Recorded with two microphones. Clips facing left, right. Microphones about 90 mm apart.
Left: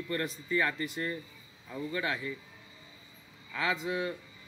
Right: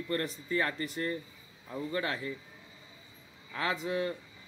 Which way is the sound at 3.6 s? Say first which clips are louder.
Left 1 dB; 40° right (ahead or behind).